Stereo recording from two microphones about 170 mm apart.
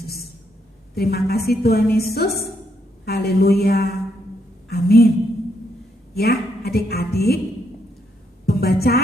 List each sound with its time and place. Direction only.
0.9 s music: 65° left (ahead or behind)
3.1 s a woman's voice: 65° left (ahead or behind)
6.1 s a woman's voice: 65° left (ahead or behind)
8.4 s a woman's voice: 65° left (ahead or behind)